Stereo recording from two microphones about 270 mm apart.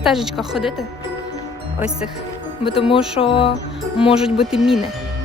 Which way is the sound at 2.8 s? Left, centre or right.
Centre.